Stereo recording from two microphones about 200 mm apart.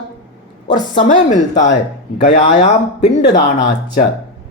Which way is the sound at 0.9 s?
35° left (ahead or behind).